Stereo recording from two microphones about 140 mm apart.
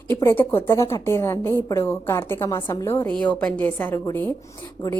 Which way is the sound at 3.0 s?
10° left (ahead or behind).